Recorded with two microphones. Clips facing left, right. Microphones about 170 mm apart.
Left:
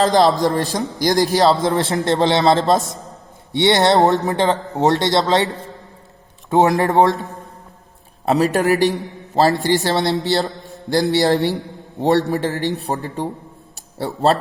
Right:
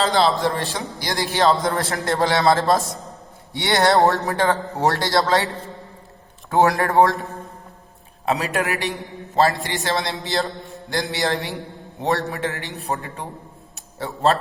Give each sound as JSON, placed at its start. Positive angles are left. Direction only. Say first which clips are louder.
{"t": 0.0, "sound": "a man's voice", "louder": "left 4 dB", "side_deg": 45}
{"t": 1.6, "sound": "speech", "louder": "left 5 dB", "side_deg": 25}
{"t": 6.5, "sound": "speech", "louder": "left 3 dB", "side_deg": 25}
{"t": 8.2, "sound": "a man's voice", "louder": "left 6 dB", "side_deg": 40}
{"t": 13.7, "sound": "a sound", "louder": "left 5 dB", "side_deg": 35}